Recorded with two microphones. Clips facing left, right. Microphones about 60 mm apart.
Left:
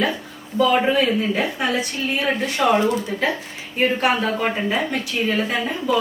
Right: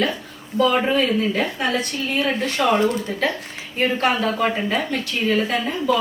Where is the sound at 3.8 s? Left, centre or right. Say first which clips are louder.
Left 1 dB; centre.